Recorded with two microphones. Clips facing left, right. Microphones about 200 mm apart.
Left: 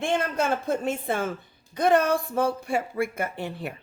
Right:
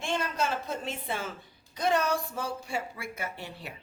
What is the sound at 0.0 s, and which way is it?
Speech, 55° left (ahead or behind).